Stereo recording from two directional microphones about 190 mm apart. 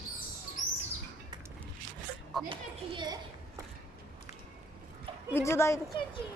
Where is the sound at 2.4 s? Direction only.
25° right (ahead or behind).